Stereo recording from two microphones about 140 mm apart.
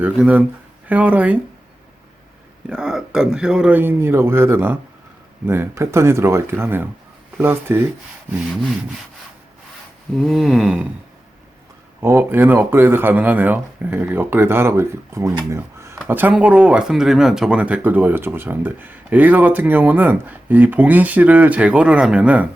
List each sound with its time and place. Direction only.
0.0 s speech: 10° right (ahead or behind)
2.6 s speech: 5° right (ahead or behind)
10.2 s a sound: centre (ahead or behind)
11.9 s speech: 15° right (ahead or behind)